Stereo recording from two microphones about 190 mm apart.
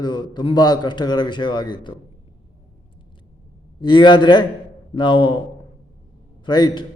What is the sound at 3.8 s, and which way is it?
A man's voice, 25° left (ahead or behind).